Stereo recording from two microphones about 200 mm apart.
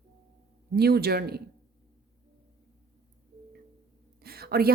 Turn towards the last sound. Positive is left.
turn(degrees=-50)  # may be behind; listen again after turning